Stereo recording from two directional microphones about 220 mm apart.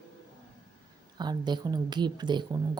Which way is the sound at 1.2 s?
20° right (ahead or behind).